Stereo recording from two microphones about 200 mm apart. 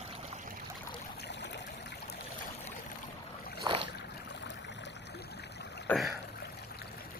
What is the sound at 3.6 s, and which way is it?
Boat, 25° right (ahead or behind).